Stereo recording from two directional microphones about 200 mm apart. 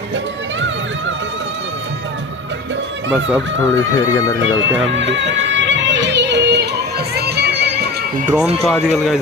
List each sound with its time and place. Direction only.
3.1 s speech: 5° right (ahead or behind)
3.7 s speech: 15° left (ahead or behind)
4.9 s music: 65° right (ahead or behind)
8.3 s speech: 5° right (ahead or behind)